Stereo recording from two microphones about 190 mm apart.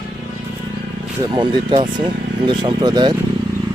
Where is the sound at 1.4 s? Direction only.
25° right (ahead or behind).